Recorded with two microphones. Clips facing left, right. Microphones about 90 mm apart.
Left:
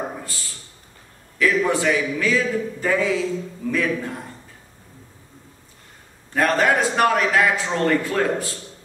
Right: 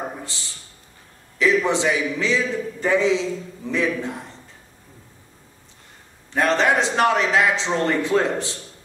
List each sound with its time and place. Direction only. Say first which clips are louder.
1.4 s a man's voice: even; 20° right (ahead or behind)
6.3 s a man's voice: even; 20° right (ahead or behind)